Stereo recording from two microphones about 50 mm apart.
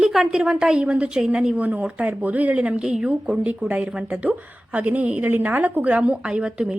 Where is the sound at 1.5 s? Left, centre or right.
Right.